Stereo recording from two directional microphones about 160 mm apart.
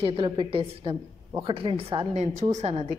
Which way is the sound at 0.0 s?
35° right (ahead or behind).